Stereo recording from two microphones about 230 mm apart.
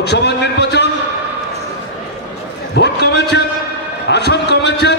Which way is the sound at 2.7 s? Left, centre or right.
Left.